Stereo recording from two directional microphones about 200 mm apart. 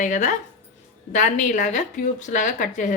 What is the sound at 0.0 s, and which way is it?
Speech, 40° left (ahead or behind).